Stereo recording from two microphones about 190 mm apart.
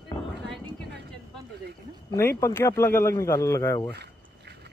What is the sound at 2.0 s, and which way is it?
A man's voice, 15° left (ahead or behind).